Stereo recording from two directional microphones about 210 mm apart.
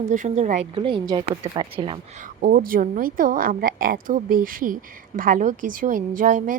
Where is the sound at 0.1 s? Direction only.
35° right (ahead or behind).